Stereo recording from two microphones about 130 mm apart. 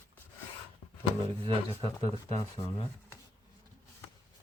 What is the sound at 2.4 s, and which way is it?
Speech, 50° left (ahead or behind).